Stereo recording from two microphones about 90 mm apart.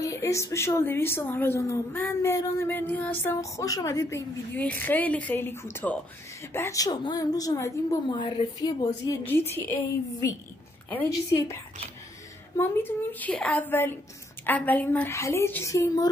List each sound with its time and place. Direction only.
0.0 s a woman's voice: 35° left (ahead or behind)
3.3 s a woman's voice: 40° left (ahead or behind)
4.6 s a woman's voice: 20° left (ahead or behind)
6.8 s a woman's voice: 55° left (ahead or behind); by 8.0 s 35° left (ahead or behind)
8.1 s a woman's voice: 55° left (ahead or behind)
9.2 s a woman's voice: 25° left (ahead or behind)
11.1 s a woman's voice: 35° left (ahead or behind)
12.5 s a woman's voice: 25° left (ahead or behind); by 16.1 s 40° left (ahead or behind)